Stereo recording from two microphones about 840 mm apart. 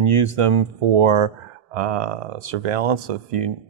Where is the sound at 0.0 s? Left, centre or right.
Right.